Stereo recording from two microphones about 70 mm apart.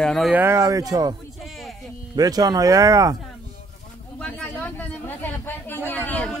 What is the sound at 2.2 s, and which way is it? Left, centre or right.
Speech, right.